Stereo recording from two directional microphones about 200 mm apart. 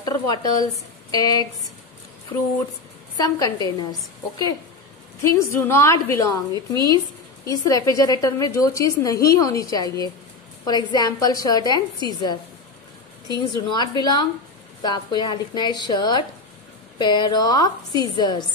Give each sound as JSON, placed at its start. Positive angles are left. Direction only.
{"t": 0.0, "sound": "a woman's voice", "side_deg": 20}
{"t": 3.2, "sound": "a woman's voice", "side_deg": 20}
{"t": 5.2, "sound": "a woman's voice", "side_deg": 15}